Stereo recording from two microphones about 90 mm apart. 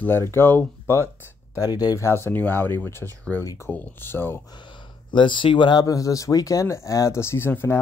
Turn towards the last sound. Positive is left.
turn(degrees=25)  # may be behind; listen again after turning